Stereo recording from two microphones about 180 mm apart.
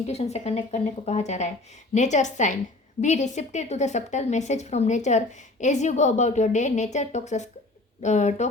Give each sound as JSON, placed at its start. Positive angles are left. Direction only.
{"t": 0.1, "sound": "a woman's voice", "side_deg": 35}